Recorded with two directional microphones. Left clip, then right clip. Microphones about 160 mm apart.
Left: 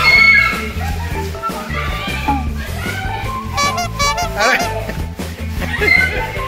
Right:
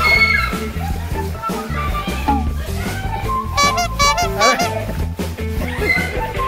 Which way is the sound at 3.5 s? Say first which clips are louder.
Right 1 dB; centre (ahead or behind).